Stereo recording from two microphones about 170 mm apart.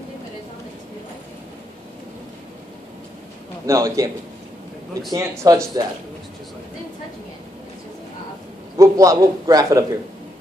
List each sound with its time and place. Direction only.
3.6 s a man's voice: 20° right (ahead or behind)
5.1 s a man's voice: 20° right (ahead or behind)
8.7 s a man's voice: 20° right (ahead or behind)